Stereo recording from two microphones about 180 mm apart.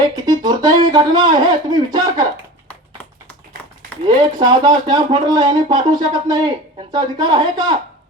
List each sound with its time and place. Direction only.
0.3 s speech: 20° right (ahead or behind)
4.0 s speech: 25° right (ahead or behind)